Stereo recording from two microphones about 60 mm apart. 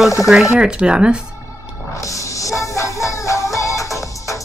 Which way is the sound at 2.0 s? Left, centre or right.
Left.